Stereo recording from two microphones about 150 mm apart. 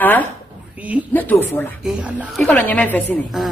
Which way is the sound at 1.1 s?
10° left (ahead or behind).